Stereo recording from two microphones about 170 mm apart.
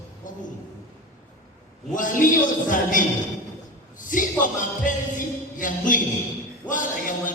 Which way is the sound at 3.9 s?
50° left (ahead or behind).